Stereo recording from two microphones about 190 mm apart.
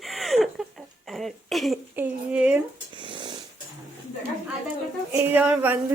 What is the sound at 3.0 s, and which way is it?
Snoring, 25° right (ahead or behind).